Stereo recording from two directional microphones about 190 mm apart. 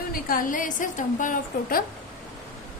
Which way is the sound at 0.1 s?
50° left (ahead or behind).